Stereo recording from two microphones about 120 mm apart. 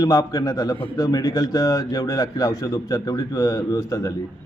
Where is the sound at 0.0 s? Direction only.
30° left (ahead or behind).